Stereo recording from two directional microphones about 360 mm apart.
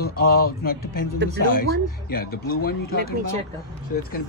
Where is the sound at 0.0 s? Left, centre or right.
Left.